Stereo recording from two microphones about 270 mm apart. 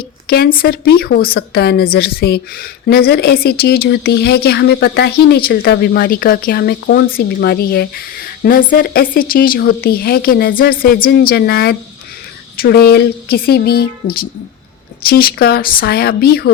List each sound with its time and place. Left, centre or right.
0.3 s a woman's voice: left